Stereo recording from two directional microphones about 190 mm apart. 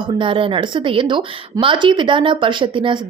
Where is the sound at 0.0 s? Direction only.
25° right (ahead or behind).